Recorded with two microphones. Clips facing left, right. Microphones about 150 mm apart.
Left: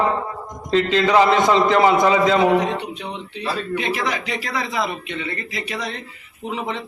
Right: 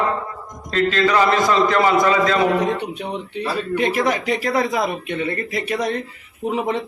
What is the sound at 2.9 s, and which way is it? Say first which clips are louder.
Speech: right 4 dB; 50° right (ahead or behind).